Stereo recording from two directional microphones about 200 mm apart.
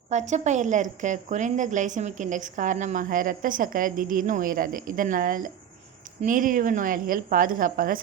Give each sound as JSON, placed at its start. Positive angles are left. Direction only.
{"t": 0.1, "sound": "a woman's voice", "side_deg": -35}